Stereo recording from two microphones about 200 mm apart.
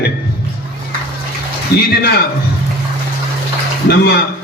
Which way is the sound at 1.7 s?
50° left (ahead or behind).